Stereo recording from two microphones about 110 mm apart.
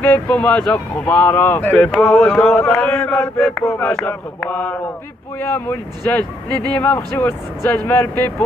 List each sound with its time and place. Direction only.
0.0 s speech: 15° left (ahead or behind)
3.7 s speech: 15° left (ahead or behind)